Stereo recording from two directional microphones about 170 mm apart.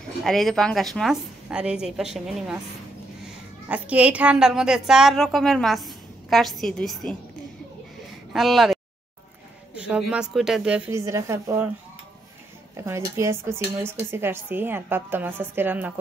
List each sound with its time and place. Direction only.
0.2 s a woman's voice: centre (ahead or behind)
3.6 s a woman's voice: 10° right (ahead or behind)
8.3 s speech: centre (ahead or behind)
9.8 s a woman's voice: 5° right (ahead or behind)
10.9 s speech: 15° right (ahead or behind)
12.7 s speech: 15° right (ahead or behind)